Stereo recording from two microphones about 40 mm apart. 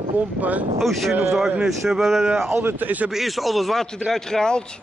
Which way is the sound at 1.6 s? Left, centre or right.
Centre.